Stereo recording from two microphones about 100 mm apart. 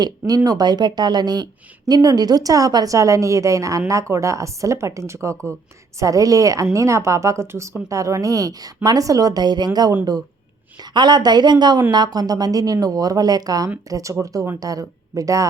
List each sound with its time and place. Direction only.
0.0 s speech: 40° right (ahead or behind)